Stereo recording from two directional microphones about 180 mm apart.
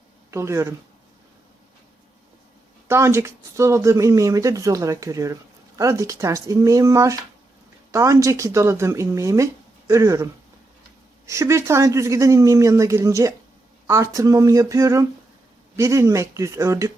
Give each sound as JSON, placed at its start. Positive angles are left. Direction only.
{"t": 0.3, "sound": "speech", "side_deg": -15}
{"t": 2.8, "sound": "speech", "side_deg": -15}
{"t": 11.3, "sound": "speech", "side_deg": -15}